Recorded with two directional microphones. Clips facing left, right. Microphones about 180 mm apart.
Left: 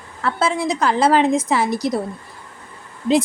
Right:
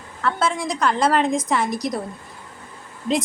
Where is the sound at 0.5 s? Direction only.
5° left (ahead or behind).